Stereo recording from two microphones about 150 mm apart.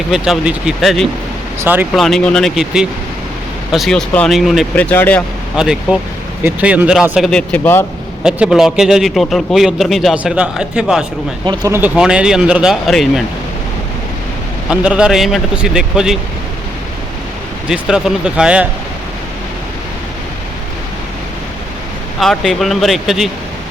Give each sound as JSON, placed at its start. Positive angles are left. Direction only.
{"t": 0.1, "sound": "a man's voice", "side_deg": -5}
{"t": 1.6, "sound": "speech", "side_deg": -15}
{"t": 1.9, "sound": "a man's voice", "side_deg": 0}
{"t": 4.7, "sound": "speech", "side_deg": 10}
{"t": 5.5, "sound": "a man's voice", "side_deg": -5}
{"t": 7.3, "sound": "speech", "side_deg": 5}
{"t": 8.2, "sound": "a man's voice", "side_deg": -5}
{"t": 11.4, "sound": "speech", "side_deg": -30}
{"t": 11.7, "sound": "a man's voice", "side_deg": -10}
{"t": 14.7, "sound": "a man's voice", "side_deg": -5}
{"t": 17.7, "sound": "a man's voice", "side_deg": -5}
{"t": 22.2, "sound": "a man's voice", "side_deg": 0}